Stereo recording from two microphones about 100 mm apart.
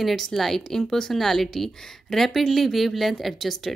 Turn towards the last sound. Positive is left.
turn(degrees=0)  # may be behind; listen again after turning